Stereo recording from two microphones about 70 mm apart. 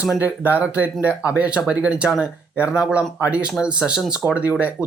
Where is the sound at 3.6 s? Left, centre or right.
Centre.